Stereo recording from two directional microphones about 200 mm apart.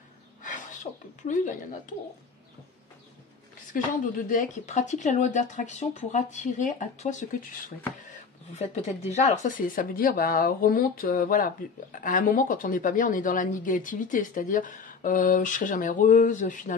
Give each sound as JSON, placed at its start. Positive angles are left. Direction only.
{"t": 0.4, "sound": "sneeze", "side_deg": 40}
{"t": 1.2, "sound": "speech", "side_deg": 40}
{"t": 3.7, "sound": "speech", "side_deg": 40}
{"t": 8.5, "sound": "speech", "side_deg": 35}